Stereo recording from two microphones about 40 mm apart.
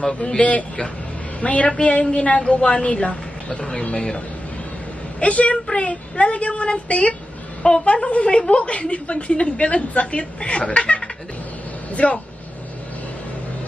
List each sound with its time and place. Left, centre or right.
0.4 s a woman's voice: left
5.2 s a woman's voice: left